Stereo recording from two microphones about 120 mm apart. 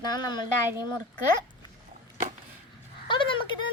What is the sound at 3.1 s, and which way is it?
Speech, 40° left (ahead or behind).